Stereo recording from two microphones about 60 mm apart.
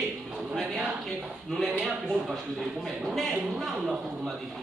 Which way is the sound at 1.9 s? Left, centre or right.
Centre.